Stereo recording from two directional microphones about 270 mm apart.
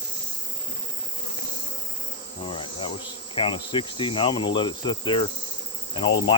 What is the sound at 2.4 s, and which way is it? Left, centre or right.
Insect, centre.